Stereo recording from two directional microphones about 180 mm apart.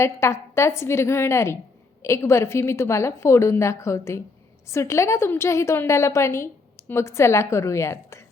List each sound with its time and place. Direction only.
0.0 s a woman's voice: 15° left (ahead or behind)